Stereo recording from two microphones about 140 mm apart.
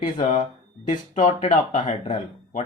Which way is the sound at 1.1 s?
55° left (ahead or behind).